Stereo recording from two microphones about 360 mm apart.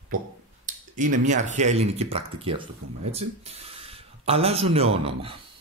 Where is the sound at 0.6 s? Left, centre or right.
Right.